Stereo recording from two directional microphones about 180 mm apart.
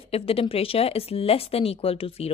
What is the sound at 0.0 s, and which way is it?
A woman's voice, 30° left (ahead or behind).